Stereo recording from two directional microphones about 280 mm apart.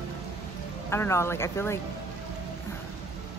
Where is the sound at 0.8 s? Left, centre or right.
Centre.